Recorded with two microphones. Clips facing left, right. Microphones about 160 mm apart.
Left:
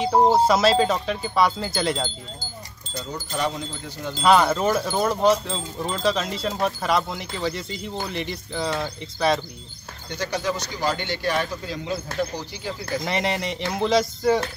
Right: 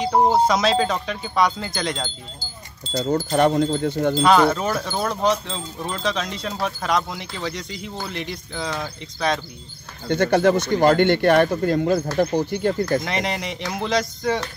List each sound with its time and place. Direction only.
0.0 s speech: 5° left (ahead or behind)
3.0 s speech: 60° right (ahead or behind)
4.2 s speech: 5° left (ahead or behind)
10.0 s speech: 55° right (ahead or behind)
13.0 s speech: centre (ahead or behind)